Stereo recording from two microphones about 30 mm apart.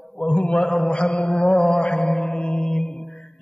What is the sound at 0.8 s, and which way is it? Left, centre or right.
Mantra, left.